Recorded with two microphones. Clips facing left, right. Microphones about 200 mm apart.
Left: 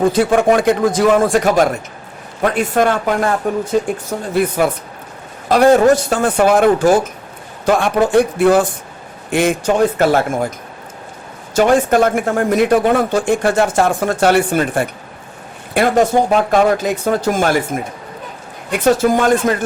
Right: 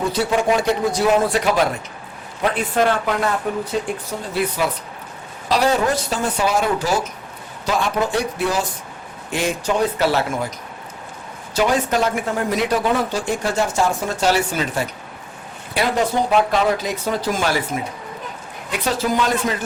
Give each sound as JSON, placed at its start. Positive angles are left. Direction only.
{"t": 0.0, "sound": "speech", "side_deg": 50}
{"t": 11.5, "sound": "speech", "side_deg": 50}